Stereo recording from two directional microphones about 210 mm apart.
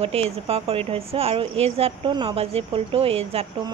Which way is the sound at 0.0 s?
30° right (ahead or behind).